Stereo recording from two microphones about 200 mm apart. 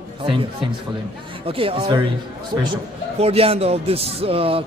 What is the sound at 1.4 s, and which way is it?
Speech, 25° right (ahead or behind).